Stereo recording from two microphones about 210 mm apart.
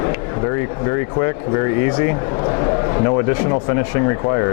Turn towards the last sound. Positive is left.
turn(degrees=20)  # may be behind; listen again after turning